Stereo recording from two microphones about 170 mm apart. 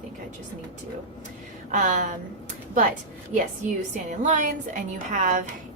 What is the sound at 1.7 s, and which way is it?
Speech, 50° right (ahead or behind).